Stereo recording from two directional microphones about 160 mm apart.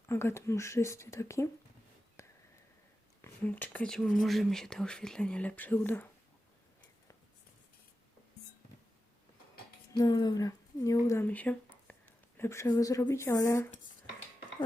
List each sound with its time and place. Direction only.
0.1 s speech: 15° left (ahead or behind)
2.2 s a sound: 20° left (ahead or behind)
3.2 s speech: 15° left (ahead or behind)
9.9 s speech: 25° left (ahead or behind)